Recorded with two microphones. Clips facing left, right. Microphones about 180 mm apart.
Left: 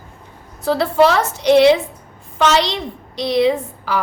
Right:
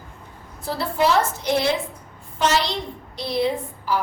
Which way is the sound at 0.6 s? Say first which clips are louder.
Left 8 dB; 75° left (ahead or behind).